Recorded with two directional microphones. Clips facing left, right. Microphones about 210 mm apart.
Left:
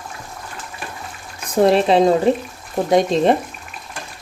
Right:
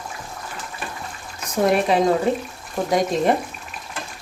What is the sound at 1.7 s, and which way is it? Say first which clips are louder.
Speech: left 3 dB; 25° left (ahead or behind).